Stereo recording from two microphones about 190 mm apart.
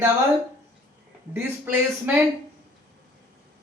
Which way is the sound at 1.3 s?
10° right (ahead or behind).